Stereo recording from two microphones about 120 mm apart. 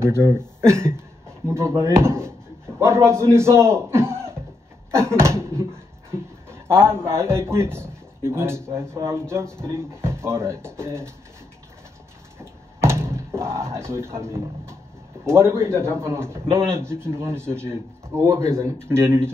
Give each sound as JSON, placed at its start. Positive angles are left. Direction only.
{"t": 0.0, "sound": "a man's voice", "side_deg": -25}
{"t": 12.4, "sound": "a sound", "side_deg": -20}
{"t": 15.2, "sound": "a man's voice", "side_deg": -20}